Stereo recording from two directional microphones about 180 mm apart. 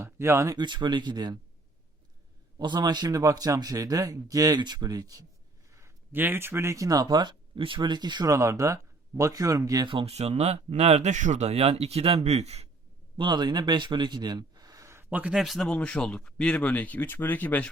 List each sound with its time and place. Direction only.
0.0 s speech: 15° right (ahead or behind)
2.6 s speech: 25° right (ahead or behind)
13.1 s speech: 25° right (ahead or behind); by 17.7 s 10° left (ahead or behind)